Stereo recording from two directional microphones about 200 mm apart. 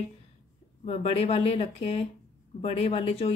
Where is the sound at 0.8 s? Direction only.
30° left (ahead or behind).